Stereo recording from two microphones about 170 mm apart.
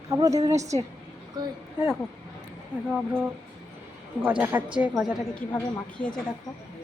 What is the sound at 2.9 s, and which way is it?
Speech, 10° right (ahead or behind).